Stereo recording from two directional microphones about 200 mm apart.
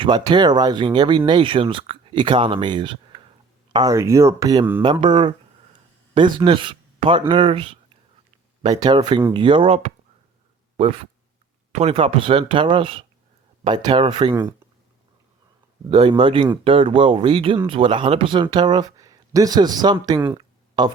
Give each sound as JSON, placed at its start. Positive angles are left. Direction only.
{"t": 0.0, "sound": "speech", "side_deg": -25}
{"t": 8.8, "sound": "speech", "side_deg": -20}
{"t": 11.7, "sound": "speech", "side_deg": -30}
{"t": 15.9, "sound": "speech", "side_deg": -25}